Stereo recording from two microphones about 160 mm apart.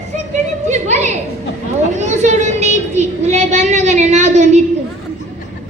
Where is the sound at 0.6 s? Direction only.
45° right (ahead or behind).